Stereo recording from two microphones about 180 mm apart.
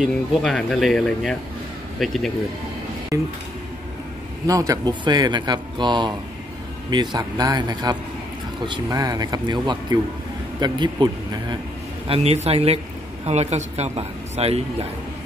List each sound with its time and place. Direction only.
0.0 s speech: centre (ahead or behind)
3.1 s speech: 15° right (ahead or behind)
4.5 s speech: 20° right (ahead or behind)
12.1 s speech: 35° right (ahead or behind)